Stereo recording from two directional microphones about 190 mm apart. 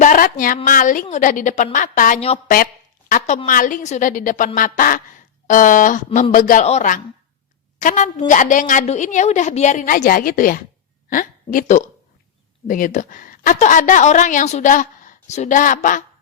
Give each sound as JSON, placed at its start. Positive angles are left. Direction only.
{"t": 0.0, "sound": "a woman's voice", "side_deg": 45}